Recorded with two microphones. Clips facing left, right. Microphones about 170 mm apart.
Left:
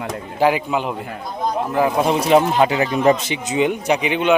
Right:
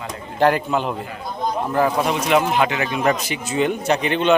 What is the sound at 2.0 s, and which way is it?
A man's voice, 30° left (ahead or behind).